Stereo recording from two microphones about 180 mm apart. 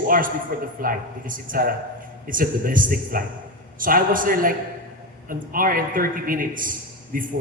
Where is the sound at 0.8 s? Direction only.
50° right (ahead or behind).